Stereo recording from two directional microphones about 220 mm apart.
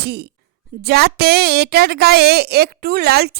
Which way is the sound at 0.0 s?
45° right (ahead or behind).